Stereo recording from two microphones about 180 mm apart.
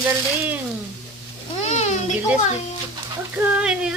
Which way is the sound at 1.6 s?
40° left (ahead or behind).